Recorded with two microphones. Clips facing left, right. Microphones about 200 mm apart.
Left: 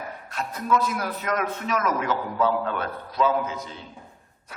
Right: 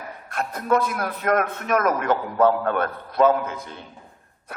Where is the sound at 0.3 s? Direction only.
55° right (ahead or behind).